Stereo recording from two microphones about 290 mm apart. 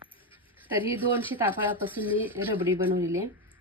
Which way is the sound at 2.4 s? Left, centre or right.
Centre.